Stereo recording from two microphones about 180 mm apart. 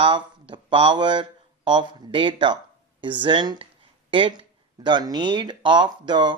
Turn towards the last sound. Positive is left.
turn(degrees=-25)  # may be behind; listen again after turning